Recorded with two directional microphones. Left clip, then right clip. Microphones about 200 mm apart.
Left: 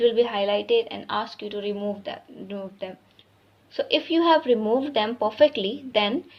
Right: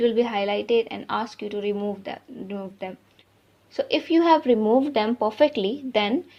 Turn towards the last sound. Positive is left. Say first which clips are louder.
# even
turn(degrees=-35)  # may be behind; listen again after turning